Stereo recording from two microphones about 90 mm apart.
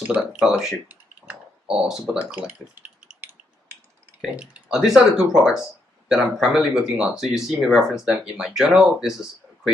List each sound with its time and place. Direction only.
0.0 s speech: 10° right (ahead or behind)
0.8 s typing: 15° right (ahead or behind)
1.9 s speech: 5° right (ahead or behind)
2.7 s a sound: 15° right (ahead or behind)
4.7 s speech: 5° right (ahead or behind)